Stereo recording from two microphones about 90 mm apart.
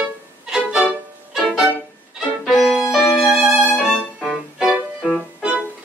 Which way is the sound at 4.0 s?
10° left (ahead or behind).